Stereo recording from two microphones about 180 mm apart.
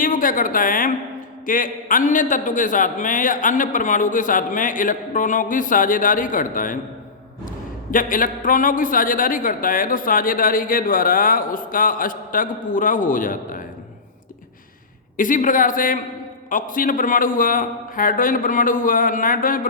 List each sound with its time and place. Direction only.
0.0 s a woman's voice: 50° left (ahead or behind)
7.9 s a man's voice: 50° left (ahead or behind)
15.2 s a man's voice: 45° left (ahead or behind)